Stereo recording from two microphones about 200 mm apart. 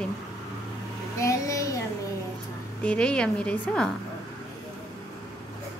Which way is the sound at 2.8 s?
5° left (ahead or behind).